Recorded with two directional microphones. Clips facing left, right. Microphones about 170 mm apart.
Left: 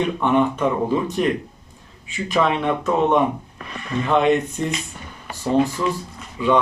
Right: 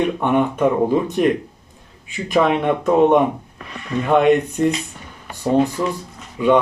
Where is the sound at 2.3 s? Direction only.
50° right (ahead or behind).